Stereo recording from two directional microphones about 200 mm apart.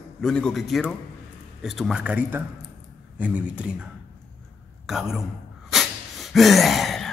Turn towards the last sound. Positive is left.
turn(degrees=0)  # may be behind; listen again after turning